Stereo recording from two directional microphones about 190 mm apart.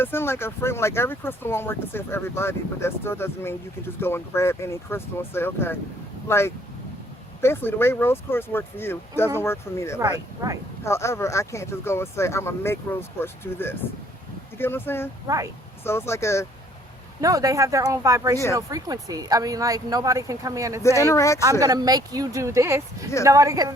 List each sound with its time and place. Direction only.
0.0 s speech: 10° left (ahead or behind)
10.0 s speech: 15° right (ahead or behind)
10.8 s speech: 15° left (ahead or behind)
17.2 s speech: 15° right (ahead or behind)
20.8 s speech: 15° left (ahead or behind)
21.6 s speech: 20° right (ahead or behind)